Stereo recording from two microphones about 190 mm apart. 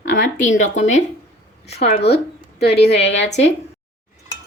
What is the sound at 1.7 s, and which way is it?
A woman's voice, 60° left (ahead or behind).